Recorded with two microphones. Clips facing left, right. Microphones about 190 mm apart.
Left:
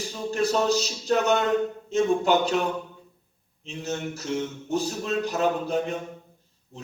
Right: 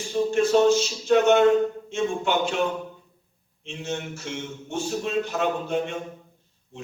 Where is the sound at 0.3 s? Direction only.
35° left (ahead or behind).